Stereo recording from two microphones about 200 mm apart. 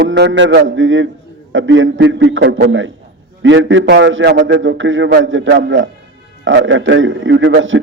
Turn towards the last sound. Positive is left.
turn(degrees=-70)  # may be behind; listen again after turning